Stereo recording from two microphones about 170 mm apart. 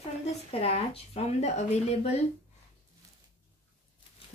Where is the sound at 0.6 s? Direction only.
35° left (ahead or behind).